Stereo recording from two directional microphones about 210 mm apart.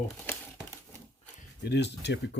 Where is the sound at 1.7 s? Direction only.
55° left (ahead or behind).